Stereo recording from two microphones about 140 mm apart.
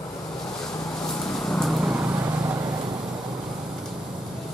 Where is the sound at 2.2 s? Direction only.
20° right (ahead or behind).